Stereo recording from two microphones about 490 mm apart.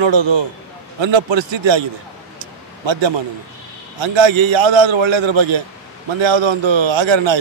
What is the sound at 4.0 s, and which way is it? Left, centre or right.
A man's voice, right.